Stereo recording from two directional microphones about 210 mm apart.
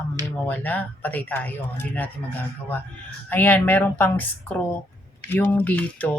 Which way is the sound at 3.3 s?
10° left (ahead or behind).